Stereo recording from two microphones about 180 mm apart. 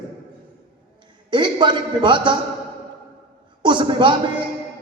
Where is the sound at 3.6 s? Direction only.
25° right (ahead or behind).